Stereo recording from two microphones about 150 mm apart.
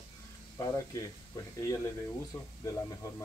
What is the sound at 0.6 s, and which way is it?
Speech, 25° left (ahead or behind).